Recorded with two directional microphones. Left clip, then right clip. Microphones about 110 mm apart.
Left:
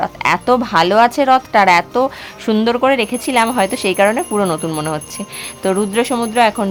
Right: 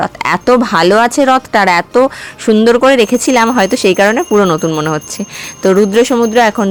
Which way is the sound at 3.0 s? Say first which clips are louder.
Right 5 dB; 50° right (ahead or behind).